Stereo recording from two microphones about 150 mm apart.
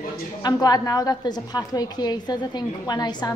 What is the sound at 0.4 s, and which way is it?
A woman's voice, 25° left (ahead or behind).